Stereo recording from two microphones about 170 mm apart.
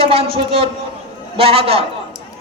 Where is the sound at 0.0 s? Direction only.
35° right (ahead or behind).